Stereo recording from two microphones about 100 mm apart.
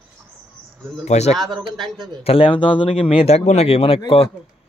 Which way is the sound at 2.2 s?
70° left (ahead or behind).